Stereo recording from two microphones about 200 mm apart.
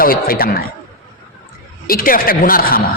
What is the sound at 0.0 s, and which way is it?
Speech, 45° left (ahead or behind).